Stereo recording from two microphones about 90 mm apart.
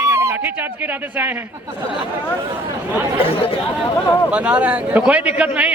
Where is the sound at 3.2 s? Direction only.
90° left.